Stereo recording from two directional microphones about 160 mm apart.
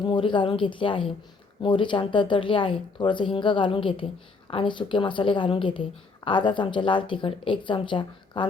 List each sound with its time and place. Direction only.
0.0 s a woman's voice: 30° left (ahead or behind)